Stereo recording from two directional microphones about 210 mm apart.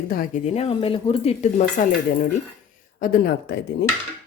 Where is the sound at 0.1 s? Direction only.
40° left (ahead or behind).